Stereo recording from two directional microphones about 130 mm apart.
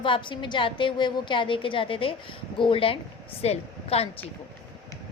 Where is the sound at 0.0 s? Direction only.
40° left (ahead or behind).